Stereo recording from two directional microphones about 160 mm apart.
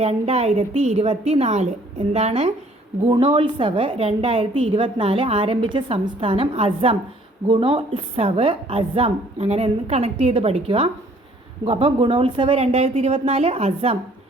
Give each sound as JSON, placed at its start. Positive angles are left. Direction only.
{"t": 0.0, "sound": "a woman's voice", "side_deg": -40}